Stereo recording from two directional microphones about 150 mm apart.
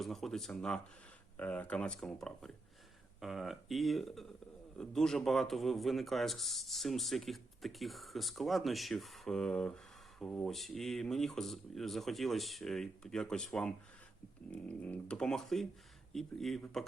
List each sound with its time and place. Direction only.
0.0 s a man's voice: centre (ahead or behind)